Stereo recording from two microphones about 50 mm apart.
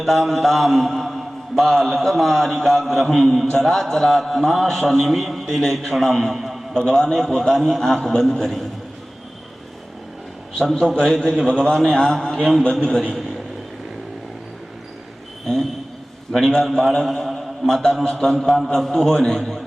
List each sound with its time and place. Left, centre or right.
0.0 s a man's voice: centre
10.8 s a man's voice: centre
16.3 s a man's voice: centre
18.4 s a man's voice: centre
18.7 s a man's voice: centre